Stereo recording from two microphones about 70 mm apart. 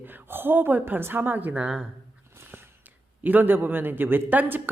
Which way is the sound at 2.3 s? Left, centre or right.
Right.